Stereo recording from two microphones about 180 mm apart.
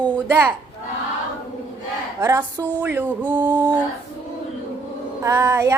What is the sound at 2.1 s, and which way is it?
Speech, 15° right (ahead or behind).